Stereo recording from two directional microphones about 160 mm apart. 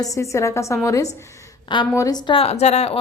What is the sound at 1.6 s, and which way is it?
A woman's voice, 30° left (ahead or behind).